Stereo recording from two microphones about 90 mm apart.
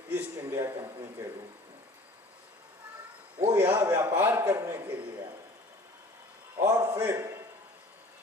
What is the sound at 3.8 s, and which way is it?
Speech, 25° right (ahead or behind).